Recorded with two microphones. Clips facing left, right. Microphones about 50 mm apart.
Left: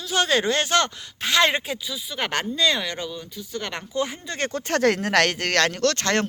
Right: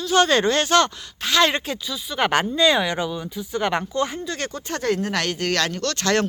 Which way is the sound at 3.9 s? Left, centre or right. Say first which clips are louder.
Right 2 dB; centre.